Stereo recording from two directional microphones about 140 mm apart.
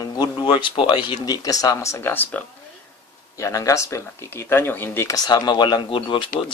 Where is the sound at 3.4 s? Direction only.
25° left (ahead or behind).